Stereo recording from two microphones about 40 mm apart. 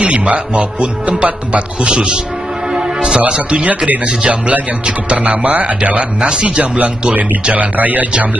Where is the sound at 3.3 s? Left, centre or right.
Right.